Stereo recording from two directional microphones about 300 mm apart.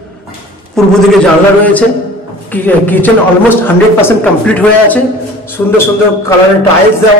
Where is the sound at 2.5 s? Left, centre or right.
Centre.